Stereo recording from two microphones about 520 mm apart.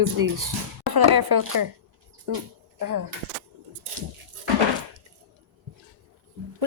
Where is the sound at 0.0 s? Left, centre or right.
Right.